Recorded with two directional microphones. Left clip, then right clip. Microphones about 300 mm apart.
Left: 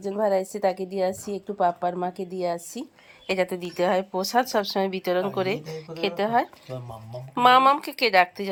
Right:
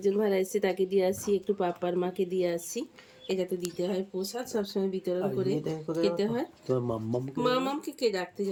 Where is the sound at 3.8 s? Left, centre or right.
Left.